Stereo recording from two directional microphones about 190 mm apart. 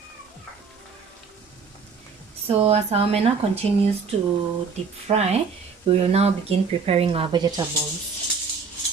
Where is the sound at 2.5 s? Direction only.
30° right (ahead or behind).